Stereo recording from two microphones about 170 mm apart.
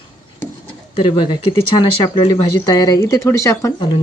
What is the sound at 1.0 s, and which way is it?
Speech, 30° left (ahead or behind).